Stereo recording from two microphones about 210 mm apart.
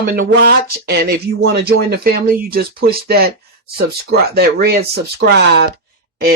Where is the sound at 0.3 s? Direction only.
50° right (ahead or behind).